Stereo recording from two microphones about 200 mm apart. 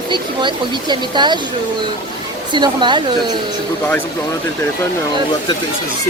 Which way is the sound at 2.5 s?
25° right (ahead or behind).